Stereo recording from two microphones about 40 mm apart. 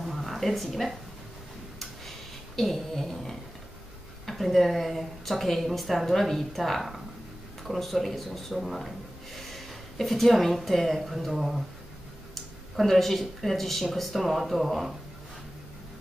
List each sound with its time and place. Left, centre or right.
0.0 s a sound: centre
4.3 s a woman's voice: centre
12.7 s a woman's voice: centre